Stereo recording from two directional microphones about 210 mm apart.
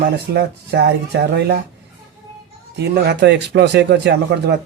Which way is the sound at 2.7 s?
55° right (ahead or behind).